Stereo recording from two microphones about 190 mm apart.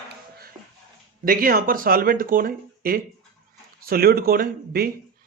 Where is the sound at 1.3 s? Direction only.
50° right (ahead or behind).